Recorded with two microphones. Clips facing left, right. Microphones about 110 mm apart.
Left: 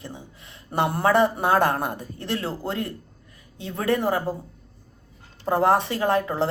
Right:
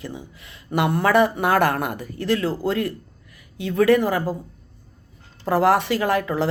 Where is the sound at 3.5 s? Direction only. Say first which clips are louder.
Right 7 dB; 90° right.